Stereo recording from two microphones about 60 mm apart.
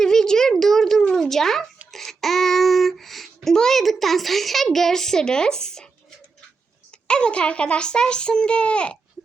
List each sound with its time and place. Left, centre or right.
0.0 s a sound: centre
1.9 s child singing: centre
7.1 s a child's voice: centre